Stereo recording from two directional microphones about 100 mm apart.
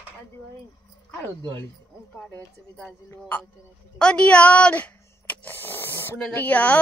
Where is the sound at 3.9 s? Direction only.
10° left (ahead or behind).